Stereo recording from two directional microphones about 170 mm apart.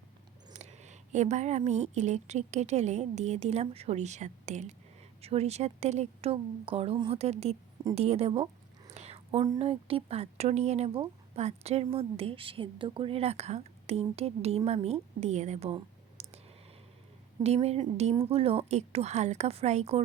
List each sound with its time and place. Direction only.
0.5 s speech: 40° right (ahead or behind)
9.0 s whispering: 40° right (ahead or behind)
9.6 s speech: 35° right (ahead or behind)
17.4 s speech: 40° right (ahead or behind)